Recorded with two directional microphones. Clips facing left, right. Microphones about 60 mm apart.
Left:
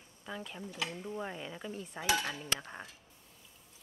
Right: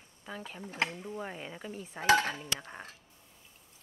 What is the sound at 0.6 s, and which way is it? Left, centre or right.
Speech, right.